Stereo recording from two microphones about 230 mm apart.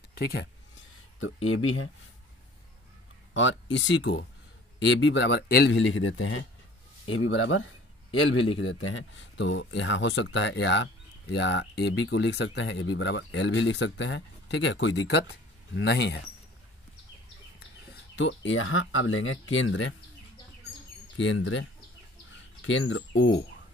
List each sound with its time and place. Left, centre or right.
0.1 s speech: left
1.2 s speech: left
3.3 s speech: left
18.1 s speech: left
21.2 s speech: left